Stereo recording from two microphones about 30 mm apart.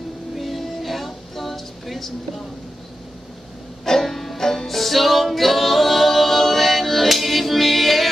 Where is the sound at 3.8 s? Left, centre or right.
Centre.